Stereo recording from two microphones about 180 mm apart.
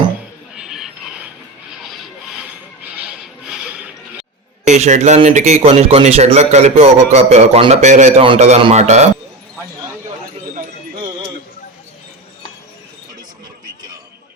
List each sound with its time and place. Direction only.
0.5 s a sound: 5° right (ahead or behind)
1.8 s rub: centre (ahead or behind)
4.6 s a man's voice: 40° right (ahead or behind)